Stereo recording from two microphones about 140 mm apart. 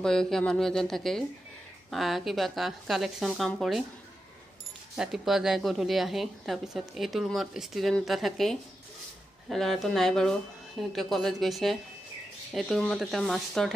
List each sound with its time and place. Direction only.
0.0 s a woman's voice: 5° left (ahead or behind)
4.9 s a woman's voice: 5° right (ahead or behind)